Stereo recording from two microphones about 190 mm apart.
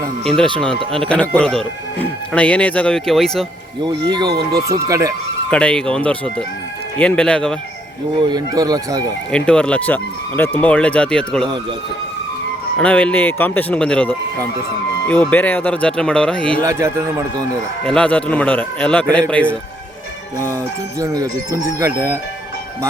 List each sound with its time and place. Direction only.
0.3 s speech: 5° left (ahead or behind)
4.0 s speech: 20° right (ahead or behind)
5.5 s speech: 5° left (ahead or behind)
8.2 s speech: 20° right (ahead or behind)
9.3 s speech: 5° left (ahead or behind)
12.7 s speech: 5° left (ahead or behind)
16.6 s speech: 15° right (ahead or behind)
17.8 s speech: 5° left (ahead or behind)
21.0 s speech: 20° right (ahead or behind)